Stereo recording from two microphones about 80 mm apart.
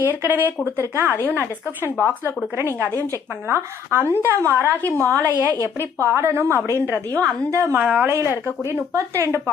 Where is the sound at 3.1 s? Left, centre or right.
Right.